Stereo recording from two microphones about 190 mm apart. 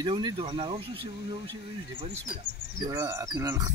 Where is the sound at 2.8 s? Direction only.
15° right (ahead or behind).